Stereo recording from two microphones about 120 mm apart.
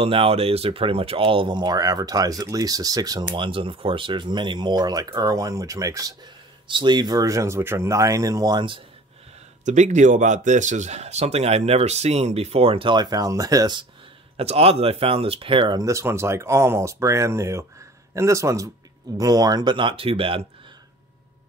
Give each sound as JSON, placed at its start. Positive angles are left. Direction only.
{"t": 0.0, "sound": "speech", "side_deg": -50}
{"t": 6.7, "sound": "speech", "side_deg": -40}
{"t": 9.7, "sound": "speech", "side_deg": -85}
{"t": 14.3, "sound": "speech", "side_deg": -60}
{"t": 15.8, "sound": "speech", "side_deg": -25}